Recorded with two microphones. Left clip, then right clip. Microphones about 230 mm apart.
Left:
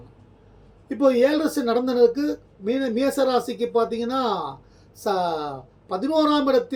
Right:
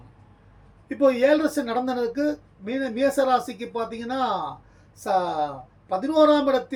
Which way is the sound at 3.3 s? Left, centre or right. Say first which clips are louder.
Even; centre.